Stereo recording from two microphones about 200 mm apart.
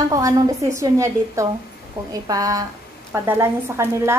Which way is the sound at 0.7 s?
15° right (ahead or behind).